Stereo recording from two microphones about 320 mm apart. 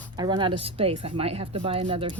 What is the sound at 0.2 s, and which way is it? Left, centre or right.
Speech, centre.